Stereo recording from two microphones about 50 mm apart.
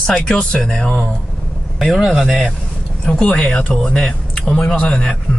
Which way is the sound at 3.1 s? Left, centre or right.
Left.